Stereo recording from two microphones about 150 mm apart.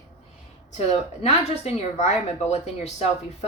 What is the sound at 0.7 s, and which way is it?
A woman's voice, 45° left (ahead or behind).